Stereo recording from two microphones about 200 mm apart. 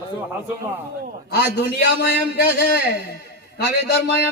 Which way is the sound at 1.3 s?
55° left (ahead or behind).